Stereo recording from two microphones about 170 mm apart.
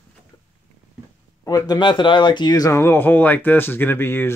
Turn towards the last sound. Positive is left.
turn(degrees=15)  # may be behind; listen again after turning